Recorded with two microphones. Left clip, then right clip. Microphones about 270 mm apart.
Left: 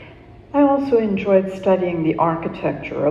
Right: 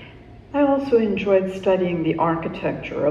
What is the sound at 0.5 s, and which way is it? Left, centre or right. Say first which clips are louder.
A man's voice: left 2 dB; left.